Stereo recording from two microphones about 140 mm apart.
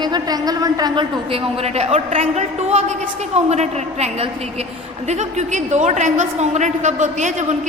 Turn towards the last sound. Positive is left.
turn(degrees=-60)  # may be behind; listen again after turning